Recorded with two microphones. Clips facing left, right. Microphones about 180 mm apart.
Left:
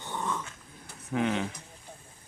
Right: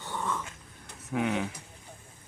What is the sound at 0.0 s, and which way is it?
Dog, 15° left (ahead or behind).